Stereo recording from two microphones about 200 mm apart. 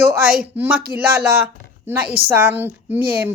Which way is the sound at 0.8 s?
50° right (ahead or behind).